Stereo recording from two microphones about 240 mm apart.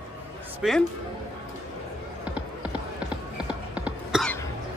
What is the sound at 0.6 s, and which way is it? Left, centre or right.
Speech, centre.